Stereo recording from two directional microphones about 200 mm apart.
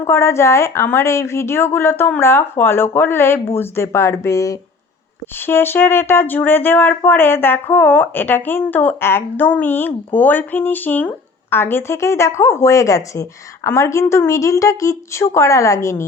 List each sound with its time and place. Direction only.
0.0 s speech: 15° left (ahead or behind)